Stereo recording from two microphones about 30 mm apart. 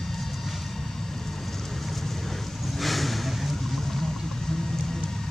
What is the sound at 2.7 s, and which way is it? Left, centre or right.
Vehicle, centre.